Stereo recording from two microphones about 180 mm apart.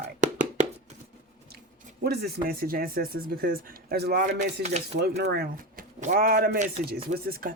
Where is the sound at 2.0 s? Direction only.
60° right (ahead or behind).